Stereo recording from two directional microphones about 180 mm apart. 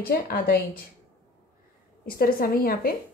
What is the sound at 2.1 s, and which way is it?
Speech, 55° left (ahead or behind).